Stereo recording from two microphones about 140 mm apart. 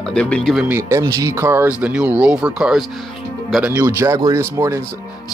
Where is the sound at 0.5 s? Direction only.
15° right (ahead or behind).